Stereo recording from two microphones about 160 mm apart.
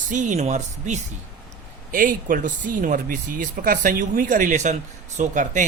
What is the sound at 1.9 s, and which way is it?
A man's voice, 60° right (ahead or behind).